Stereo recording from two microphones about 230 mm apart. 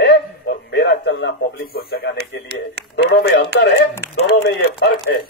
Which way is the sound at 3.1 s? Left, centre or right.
Left.